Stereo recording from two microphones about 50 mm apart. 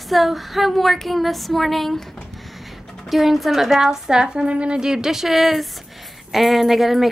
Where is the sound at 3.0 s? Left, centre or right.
Centre.